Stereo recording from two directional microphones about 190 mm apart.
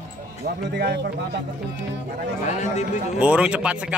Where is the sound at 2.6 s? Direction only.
40° left (ahead or behind).